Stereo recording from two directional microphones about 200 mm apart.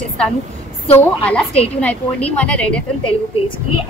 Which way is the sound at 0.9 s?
5° left (ahead or behind).